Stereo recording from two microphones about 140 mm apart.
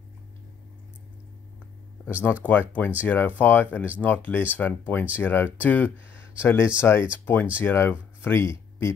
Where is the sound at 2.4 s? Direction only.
10° left (ahead or behind).